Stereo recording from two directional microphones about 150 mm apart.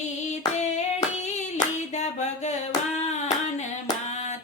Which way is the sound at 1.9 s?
50° left (ahead or behind).